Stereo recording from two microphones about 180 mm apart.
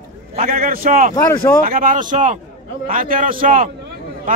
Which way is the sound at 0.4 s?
50° right (ahead or behind).